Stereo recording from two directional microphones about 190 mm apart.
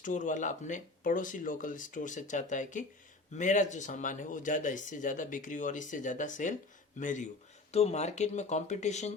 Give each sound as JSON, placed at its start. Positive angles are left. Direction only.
{"t": 0.0, "sound": "speech", "side_deg": 40}